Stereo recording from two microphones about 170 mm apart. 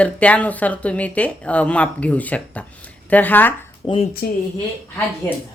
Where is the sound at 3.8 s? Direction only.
35° left (ahead or behind).